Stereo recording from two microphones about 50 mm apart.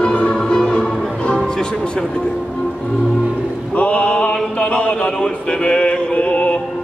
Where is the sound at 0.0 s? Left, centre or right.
Left.